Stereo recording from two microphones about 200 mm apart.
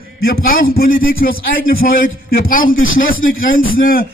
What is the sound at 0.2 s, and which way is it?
A man's voice, 50° left (ahead or behind).